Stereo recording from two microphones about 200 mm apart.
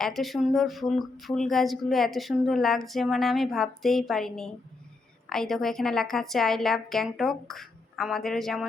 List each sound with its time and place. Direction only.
0.0 s speech: centre (ahead or behind)